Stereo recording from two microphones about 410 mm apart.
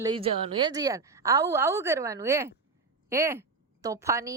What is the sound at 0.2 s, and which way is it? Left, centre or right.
A woman's voice, centre.